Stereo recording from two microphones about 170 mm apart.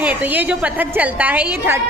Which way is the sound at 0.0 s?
10° right (ahead or behind).